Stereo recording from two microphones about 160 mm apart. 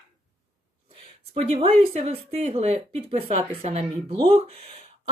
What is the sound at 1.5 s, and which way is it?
Speech, 40° right (ahead or behind).